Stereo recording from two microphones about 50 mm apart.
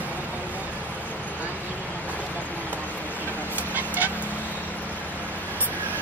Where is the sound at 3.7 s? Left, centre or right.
Right.